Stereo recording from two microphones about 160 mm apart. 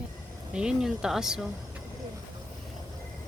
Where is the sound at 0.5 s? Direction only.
5° right (ahead or behind).